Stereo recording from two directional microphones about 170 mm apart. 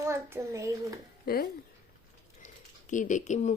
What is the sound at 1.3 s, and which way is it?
Speech, 65° left (ahead or behind).